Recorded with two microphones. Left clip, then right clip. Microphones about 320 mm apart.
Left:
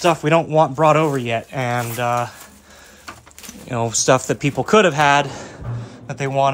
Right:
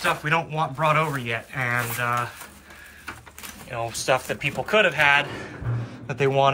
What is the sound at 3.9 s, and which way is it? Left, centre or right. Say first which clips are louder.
Speech: left 7 dB; centre.